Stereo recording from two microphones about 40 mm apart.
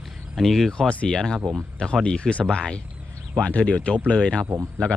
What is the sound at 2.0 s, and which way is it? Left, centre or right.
Speech, left.